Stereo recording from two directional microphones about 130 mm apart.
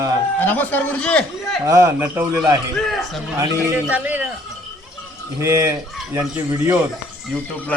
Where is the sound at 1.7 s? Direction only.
25° right (ahead or behind).